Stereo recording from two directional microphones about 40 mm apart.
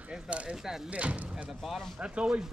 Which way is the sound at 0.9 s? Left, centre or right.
Right.